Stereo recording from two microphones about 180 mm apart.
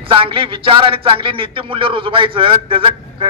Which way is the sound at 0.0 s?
30° right (ahead or behind).